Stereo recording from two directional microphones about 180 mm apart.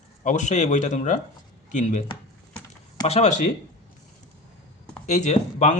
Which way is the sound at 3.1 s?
40° left (ahead or behind).